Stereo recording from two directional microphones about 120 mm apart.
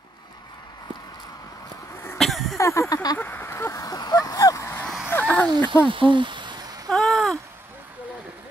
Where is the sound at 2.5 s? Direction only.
25° left (ahead or behind).